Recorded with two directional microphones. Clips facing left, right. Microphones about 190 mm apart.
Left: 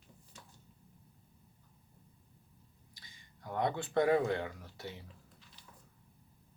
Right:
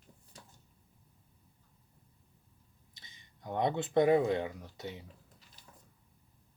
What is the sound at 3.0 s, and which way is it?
Speech, 20° right (ahead or behind).